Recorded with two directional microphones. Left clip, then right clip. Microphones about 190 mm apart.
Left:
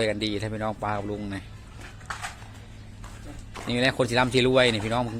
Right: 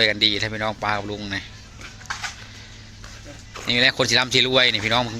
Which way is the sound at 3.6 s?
10° left (ahead or behind).